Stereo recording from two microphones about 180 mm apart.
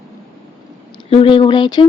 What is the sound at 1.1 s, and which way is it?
Speech, 30° left (ahead or behind).